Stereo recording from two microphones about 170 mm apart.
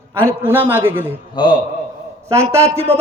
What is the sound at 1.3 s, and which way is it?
Speech, 25° left (ahead or behind).